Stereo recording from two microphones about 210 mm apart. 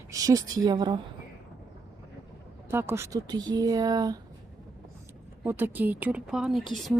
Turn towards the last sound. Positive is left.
turn(degrees=0)  # may be behind; listen again after turning